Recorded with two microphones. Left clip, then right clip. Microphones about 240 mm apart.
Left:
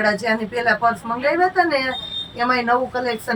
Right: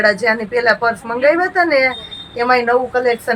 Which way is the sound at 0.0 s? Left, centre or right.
Centre.